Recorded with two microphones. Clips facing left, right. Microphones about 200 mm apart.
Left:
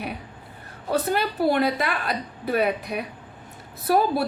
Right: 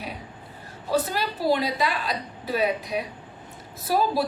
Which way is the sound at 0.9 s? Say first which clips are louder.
Left 2 dB; 55° left (ahead or behind).